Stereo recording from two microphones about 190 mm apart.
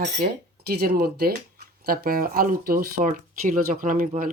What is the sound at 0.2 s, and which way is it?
Speech, 55° right (ahead or behind).